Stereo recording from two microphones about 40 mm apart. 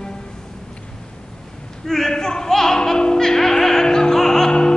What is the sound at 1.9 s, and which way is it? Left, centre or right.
Music, centre.